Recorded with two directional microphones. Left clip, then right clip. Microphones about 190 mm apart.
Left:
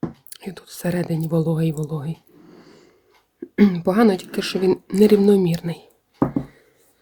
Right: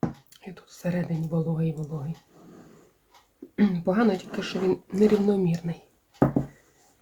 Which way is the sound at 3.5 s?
65° left (ahead or behind).